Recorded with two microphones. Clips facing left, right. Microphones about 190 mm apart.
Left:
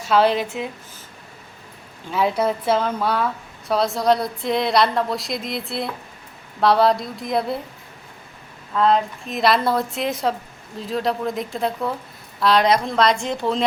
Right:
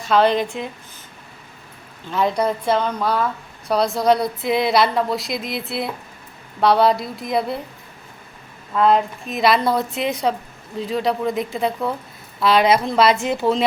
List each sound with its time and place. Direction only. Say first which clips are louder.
0.0 s speech: right 1 dB; 5° left (ahead or behind)
2.0 s a woman's voice: even; 5° left (ahead or behind)
8.7 s a woman's voice: right 2 dB; 5° right (ahead or behind)